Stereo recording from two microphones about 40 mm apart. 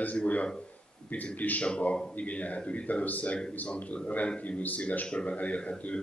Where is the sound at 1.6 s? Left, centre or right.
Left.